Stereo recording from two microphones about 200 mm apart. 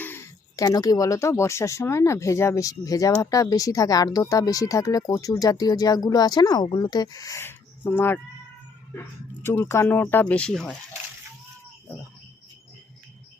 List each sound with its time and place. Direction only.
0.0 s speech: 10° left (ahead or behind)
9.4 s speech: 10° left (ahead or behind)